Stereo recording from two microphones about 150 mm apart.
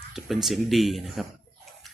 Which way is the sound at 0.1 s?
Centre (ahead or behind).